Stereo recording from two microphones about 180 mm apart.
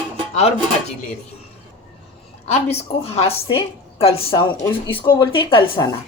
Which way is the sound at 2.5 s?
35° left (ahead or behind).